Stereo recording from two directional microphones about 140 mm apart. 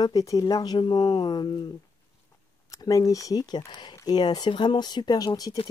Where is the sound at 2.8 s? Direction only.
25° left (ahead or behind).